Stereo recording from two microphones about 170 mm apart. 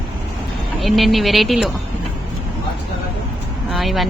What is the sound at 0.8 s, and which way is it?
Speech, centre (ahead or behind).